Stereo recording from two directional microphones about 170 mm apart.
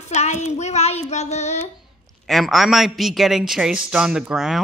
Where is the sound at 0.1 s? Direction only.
45° left (ahead or behind).